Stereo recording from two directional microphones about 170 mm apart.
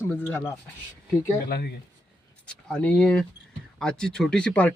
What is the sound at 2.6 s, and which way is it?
Speech, 5° left (ahead or behind).